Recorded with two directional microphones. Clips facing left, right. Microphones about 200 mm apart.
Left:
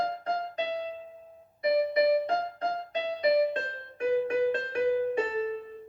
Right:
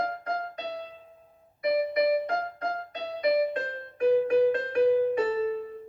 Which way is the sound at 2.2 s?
25° left (ahead or behind).